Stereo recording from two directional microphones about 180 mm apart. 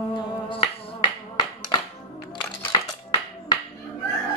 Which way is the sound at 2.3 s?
25° left (ahead or behind).